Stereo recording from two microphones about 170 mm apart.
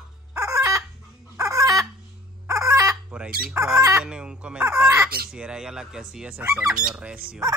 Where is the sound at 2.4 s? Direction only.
20° right (ahead or behind).